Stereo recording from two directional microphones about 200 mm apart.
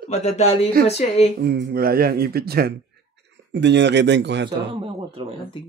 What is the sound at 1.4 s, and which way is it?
Speech, 50° right (ahead or behind).